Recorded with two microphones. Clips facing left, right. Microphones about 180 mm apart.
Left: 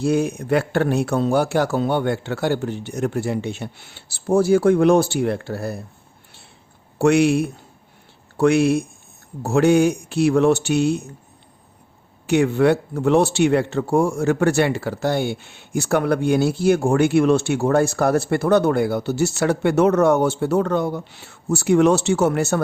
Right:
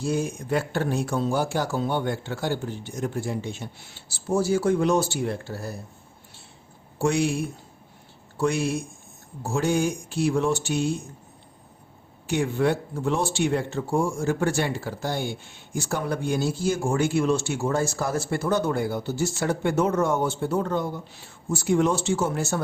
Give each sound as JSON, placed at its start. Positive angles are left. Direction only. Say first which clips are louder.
{"t": 0.0, "sound": "speech", "louder": "left 7 dB", "side_deg": 65}
{"t": 7.0, "sound": "speech", "louder": "left 8 dB", "side_deg": 70}
{"t": 12.3, "sound": "speech", "louder": "left 7 dB", "side_deg": 70}